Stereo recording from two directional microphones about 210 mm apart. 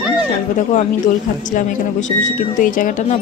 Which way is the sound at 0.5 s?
35° left (ahead or behind).